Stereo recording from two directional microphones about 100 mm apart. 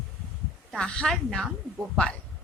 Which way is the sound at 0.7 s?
5° left (ahead or behind).